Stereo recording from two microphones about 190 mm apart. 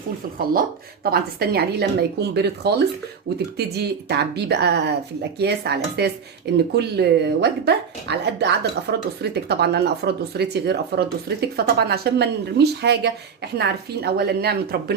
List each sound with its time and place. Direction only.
1.1 s speech: 55° right (ahead or behind)